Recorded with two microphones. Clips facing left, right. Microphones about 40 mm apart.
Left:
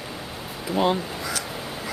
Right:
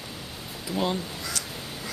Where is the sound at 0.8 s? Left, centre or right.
Centre.